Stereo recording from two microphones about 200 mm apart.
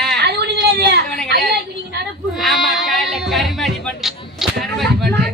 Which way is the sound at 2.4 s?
Centre (ahead or behind).